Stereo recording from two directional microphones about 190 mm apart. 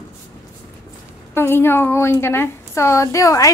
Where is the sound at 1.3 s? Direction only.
10° left (ahead or behind).